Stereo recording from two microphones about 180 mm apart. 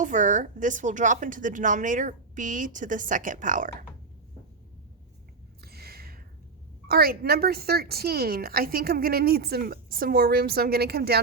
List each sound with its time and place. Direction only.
0.0 s a woman's voice: 45° right (ahead or behind)
5.6 s a sound: 60° right (ahead or behind)
6.8 s a woman's voice: 55° right (ahead or behind)